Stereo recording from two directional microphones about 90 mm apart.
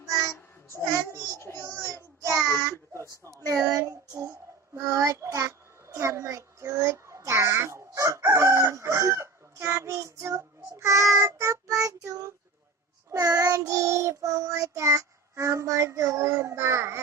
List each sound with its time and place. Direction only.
1.5 s child singing: 20° left (ahead or behind)
1.9 s child singing: 35° right (ahead or behind)
3.2 s speech: 35° right (ahead or behind)
4.8 s child singing: 30° right (ahead or behind)